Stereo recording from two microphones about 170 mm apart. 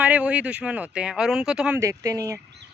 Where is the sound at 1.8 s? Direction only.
20° right (ahead or behind).